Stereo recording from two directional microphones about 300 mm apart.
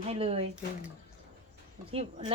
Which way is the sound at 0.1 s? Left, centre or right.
Centre.